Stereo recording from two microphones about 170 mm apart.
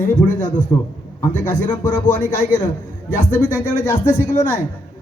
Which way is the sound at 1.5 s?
10° left (ahead or behind).